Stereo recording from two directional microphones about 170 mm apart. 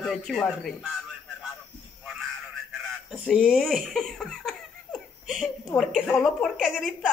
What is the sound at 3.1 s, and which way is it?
Speech, 5° right (ahead or behind).